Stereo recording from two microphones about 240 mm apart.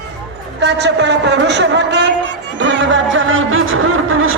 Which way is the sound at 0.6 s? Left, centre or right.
Right.